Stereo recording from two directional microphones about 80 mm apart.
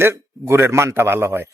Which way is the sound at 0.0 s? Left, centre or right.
Right.